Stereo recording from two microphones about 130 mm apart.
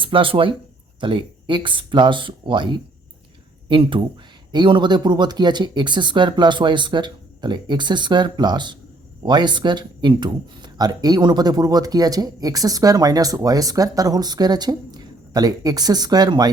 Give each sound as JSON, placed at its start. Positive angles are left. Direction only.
{"t": 0.0, "sound": "speech", "side_deg": -40}